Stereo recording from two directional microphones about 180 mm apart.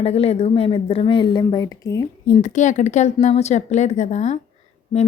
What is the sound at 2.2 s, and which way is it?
Speech, 40° left (ahead or behind).